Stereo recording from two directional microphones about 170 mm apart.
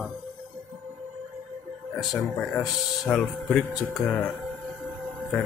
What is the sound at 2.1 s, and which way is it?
Speech, centre (ahead or behind).